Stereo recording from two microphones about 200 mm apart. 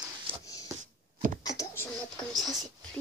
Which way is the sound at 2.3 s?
Centre (ahead or behind).